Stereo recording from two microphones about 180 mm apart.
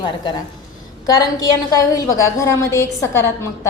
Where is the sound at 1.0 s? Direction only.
20° left (ahead or behind).